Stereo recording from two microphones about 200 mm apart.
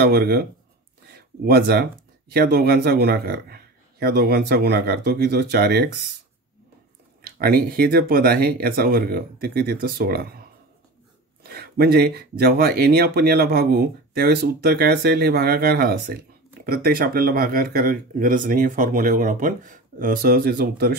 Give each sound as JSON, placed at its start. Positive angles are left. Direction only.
{"t": 0.0, "sound": "speech", "side_deg": -50}
{"t": 7.2, "sound": "speech", "side_deg": -50}
{"t": 11.4, "sound": "speech", "side_deg": -50}